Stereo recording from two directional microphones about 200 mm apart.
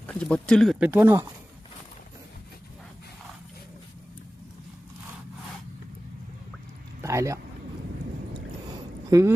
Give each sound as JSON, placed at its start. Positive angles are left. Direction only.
{"t": 0.1, "sound": "speech", "side_deg": 5}
{"t": 7.0, "sound": "a sound", "side_deg": -15}
{"t": 9.0, "sound": "speech", "side_deg": -15}